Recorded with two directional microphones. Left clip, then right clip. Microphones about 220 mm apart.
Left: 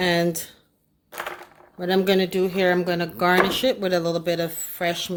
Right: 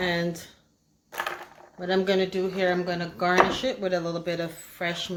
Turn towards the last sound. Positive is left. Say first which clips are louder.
# left 5 dB
turn(degrees=40)  # may be behind; listen again after turning